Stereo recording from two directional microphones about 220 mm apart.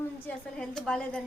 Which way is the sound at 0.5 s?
5° left (ahead or behind).